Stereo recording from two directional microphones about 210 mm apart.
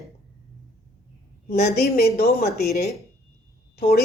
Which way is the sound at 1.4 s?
45° left (ahead or behind).